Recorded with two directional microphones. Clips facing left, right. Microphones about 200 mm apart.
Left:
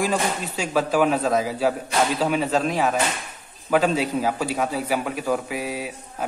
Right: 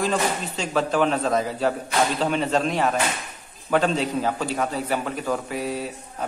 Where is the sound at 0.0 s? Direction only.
10° left (ahead or behind).